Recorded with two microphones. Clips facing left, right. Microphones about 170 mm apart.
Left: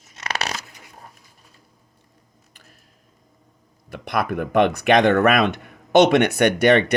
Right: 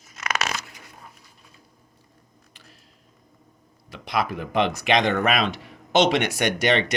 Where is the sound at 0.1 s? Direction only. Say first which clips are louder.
Even; 35° left (ahead or behind).